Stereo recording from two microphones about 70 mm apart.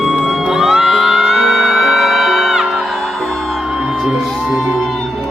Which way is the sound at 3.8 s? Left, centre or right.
Centre.